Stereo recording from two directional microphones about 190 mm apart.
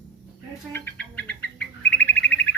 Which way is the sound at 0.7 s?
10° left (ahead or behind).